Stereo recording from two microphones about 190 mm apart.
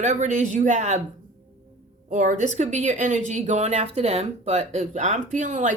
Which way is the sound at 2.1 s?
40° right (ahead or behind).